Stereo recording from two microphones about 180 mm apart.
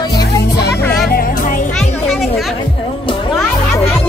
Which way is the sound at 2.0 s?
Centre (ahead or behind).